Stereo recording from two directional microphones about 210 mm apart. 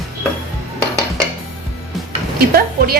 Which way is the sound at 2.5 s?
45° right (ahead or behind).